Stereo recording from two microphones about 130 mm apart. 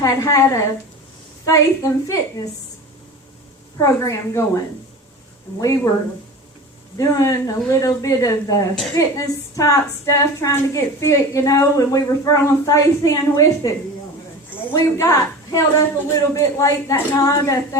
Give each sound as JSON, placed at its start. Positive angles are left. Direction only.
{"t": 0.0, "sound": "a woman's voice", "side_deg": 25}
{"t": 3.8, "sound": "a woman's voice", "side_deg": 25}
{"t": 6.9, "sound": "a woman's voice", "side_deg": 25}